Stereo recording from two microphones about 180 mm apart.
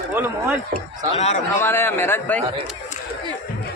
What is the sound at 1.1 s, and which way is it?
Speech, 35° left (ahead or behind).